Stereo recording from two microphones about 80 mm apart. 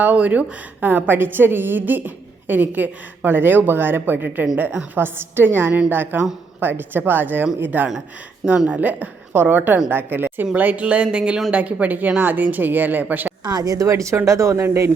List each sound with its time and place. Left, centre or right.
0.0 s a woman's voice: centre
13.4 s a woman's voice: right